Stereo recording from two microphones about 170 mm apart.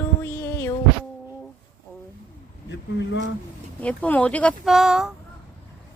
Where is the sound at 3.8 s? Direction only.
10° left (ahead or behind).